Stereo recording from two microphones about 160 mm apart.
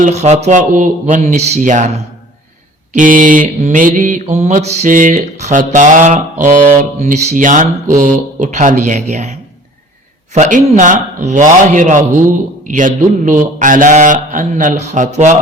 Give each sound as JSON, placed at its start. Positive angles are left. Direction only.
{"t": 0.0, "sound": "mantra", "side_deg": -45}
{"t": 2.9, "sound": "mantra", "side_deg": -55}
{"t": 10.3, "sound": "mantra", "side_deg": -50}